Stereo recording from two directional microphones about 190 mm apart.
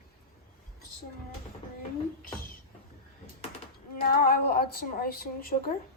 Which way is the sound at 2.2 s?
50° left (ahead or behind).